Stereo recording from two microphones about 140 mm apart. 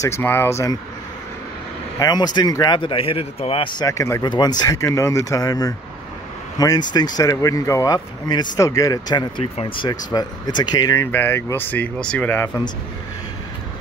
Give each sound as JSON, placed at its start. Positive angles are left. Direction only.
{"t": 0.0, "sound": "speech", "side_deg": 15}
{"t": 2.0, "sound": "speech", "side_deg": 30}
{"t": 11.1, "sound": "speech", "side_deg": 15}